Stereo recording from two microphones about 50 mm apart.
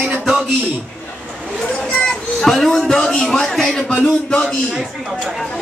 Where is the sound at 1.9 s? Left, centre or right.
Centre.